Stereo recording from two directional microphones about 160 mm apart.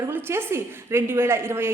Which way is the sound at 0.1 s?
15° right (ahead or behind).